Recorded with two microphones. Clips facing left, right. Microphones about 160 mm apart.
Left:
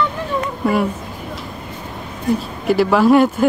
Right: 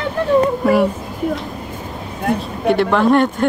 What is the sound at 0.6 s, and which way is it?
Speech, centre (ahead or behind).